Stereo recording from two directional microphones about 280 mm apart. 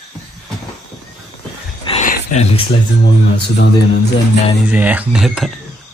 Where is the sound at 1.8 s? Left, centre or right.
Left.